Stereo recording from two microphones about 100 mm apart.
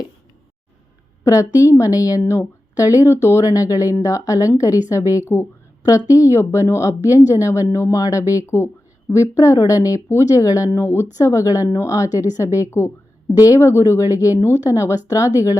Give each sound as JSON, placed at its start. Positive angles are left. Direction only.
{"t": 1.2, "sound": "speech", "side_deg": 35}